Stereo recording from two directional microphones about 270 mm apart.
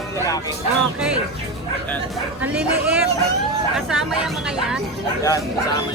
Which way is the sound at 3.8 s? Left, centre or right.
Centre.